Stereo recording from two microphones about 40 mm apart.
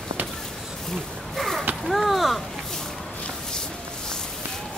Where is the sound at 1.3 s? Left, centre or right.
Centre.